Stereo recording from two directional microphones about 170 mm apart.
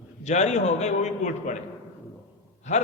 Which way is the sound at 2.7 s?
45° left (ahead or behind).